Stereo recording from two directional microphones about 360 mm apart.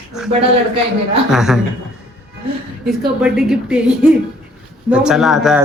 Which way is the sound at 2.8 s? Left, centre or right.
Centre.